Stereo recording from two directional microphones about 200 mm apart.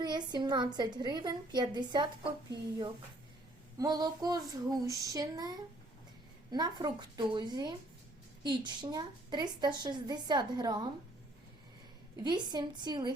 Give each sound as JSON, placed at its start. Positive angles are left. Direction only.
{"t": 0.0, "sound": "a woman's voice", "side_deg": -20}
{"t": 12.2, "sound": "a woman's voice", "side_deg": -20}